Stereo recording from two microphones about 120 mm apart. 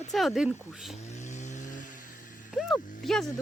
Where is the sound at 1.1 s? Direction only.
80° left.